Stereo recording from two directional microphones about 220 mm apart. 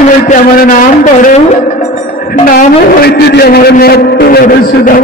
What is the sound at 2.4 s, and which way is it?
A man's voice, 40° left (ahead or behind).